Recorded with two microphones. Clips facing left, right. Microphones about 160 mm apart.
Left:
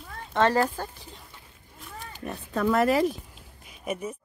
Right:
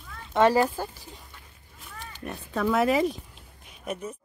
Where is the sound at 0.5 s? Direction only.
10° right (ahead or behind).